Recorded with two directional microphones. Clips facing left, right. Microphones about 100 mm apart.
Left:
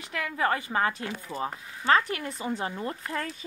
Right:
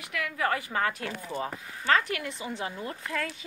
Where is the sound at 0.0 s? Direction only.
30° left (ahead or behind).